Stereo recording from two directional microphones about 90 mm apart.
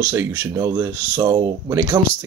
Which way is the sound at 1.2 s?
55° right (ahead or behind).